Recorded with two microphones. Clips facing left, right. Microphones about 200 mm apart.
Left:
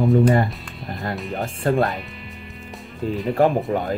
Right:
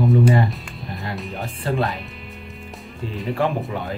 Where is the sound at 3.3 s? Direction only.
45° left (ahead or behind).